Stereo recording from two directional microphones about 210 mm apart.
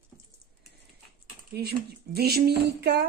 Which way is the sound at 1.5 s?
50° right (ahead or behind).